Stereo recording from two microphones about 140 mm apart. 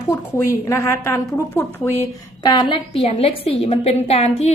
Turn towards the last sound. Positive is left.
turn(degrees=45)  # may be behind; listen again after turning